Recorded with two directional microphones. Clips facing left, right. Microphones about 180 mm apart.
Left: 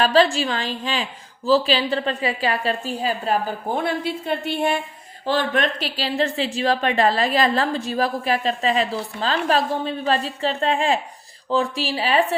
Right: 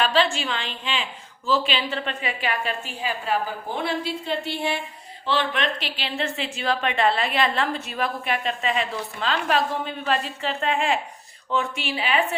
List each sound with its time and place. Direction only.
0.0 s speech: 40° left (ahead or behind)